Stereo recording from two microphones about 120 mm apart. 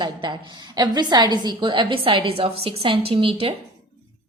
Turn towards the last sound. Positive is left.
turn(degrees=-50)  # may be behind; listen again after turning